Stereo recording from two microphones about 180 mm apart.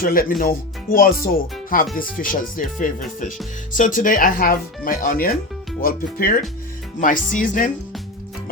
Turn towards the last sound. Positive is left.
turn(degrees=45)  # may be behind; listen again after turning